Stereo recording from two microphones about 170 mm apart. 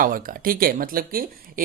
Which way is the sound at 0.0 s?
55° right (ahead or behind).